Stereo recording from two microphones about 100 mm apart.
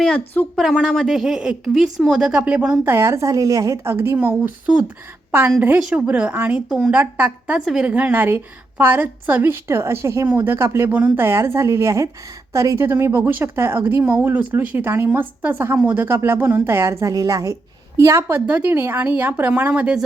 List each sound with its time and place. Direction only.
0.5 s a woman's voice: centre (ahead or behind); by 2.7 s 15° right (ahead or behind)
2.8 s speech: 25° right (ahead or behind)
6.7 s a woman's voice: 5° right (ahead or behind)
6.9 s a woman's voice: 15° right (ahead or behind)
7.9 s speech: 15° right (ahead or behind)